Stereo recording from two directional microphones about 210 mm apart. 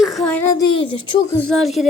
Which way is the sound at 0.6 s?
25° left (ahead or behind).